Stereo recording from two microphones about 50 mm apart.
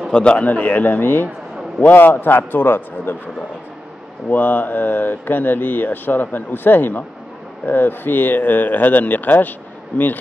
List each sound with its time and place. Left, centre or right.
0.1 s a man's voice: left
4.3 s speech: left